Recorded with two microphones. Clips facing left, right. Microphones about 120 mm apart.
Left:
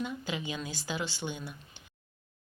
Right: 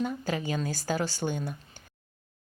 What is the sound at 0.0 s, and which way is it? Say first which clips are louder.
A woman's voice: right 5 dB; 40° right (ahead or behind).